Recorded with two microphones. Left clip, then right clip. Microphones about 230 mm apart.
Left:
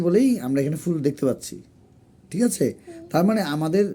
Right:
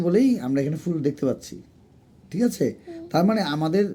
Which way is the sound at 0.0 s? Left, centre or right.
Centre.